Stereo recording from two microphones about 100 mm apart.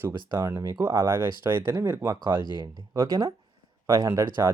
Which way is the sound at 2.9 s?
35° right (ahead or behind).